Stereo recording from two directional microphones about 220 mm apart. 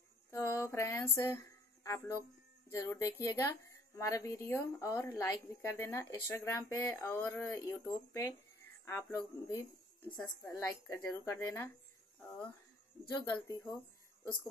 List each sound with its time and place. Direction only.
0.3 s a woman's voice: 10° left (ahead or behind)
13.1 s a woman's voice: 15° left (ahead or behind)